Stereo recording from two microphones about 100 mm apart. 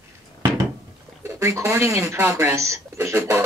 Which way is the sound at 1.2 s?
30° right (ahead or behind).